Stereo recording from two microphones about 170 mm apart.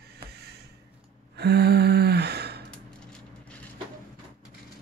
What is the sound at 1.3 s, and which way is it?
Gasp, 70° right (ahead or behind).